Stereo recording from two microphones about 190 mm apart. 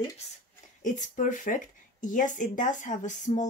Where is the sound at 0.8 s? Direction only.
40° left (ahead or behind).